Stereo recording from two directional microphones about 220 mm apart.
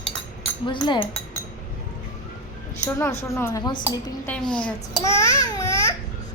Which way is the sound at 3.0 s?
10° left (ahead or behind).